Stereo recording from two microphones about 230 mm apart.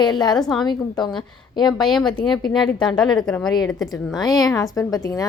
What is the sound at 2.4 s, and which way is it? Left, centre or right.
Speech, centre.